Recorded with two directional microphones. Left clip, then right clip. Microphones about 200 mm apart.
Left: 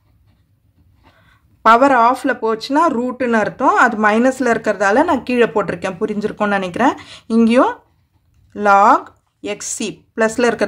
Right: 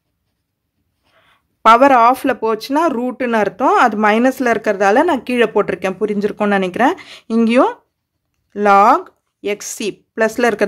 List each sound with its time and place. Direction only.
1.1 s a woman's voice: 40° right (ahead or behind)